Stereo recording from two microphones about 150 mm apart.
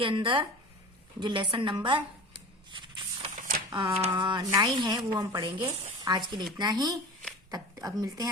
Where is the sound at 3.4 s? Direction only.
60° right (ahead or behind).